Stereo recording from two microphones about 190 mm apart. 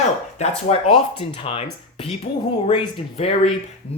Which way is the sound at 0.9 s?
30° left (ahead or behind).